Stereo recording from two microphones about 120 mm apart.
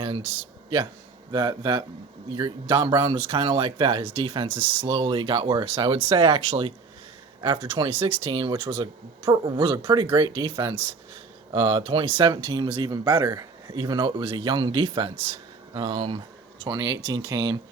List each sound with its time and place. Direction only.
1.3 s speech: 35° right (ahead or behind); by 16.2 s 50° right (ahead or behind)
16.6 s speech: 35° right (ahead or behind)